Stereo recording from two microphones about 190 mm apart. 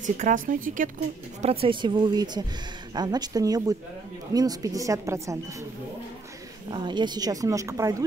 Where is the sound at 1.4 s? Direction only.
30° right (ahead or behind).